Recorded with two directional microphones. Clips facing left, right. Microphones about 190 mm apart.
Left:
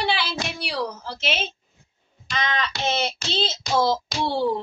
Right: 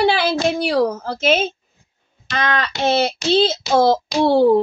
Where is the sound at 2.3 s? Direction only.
55° right (ahead or behind).